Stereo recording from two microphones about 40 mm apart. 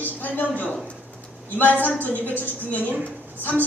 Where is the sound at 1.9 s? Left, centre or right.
Left.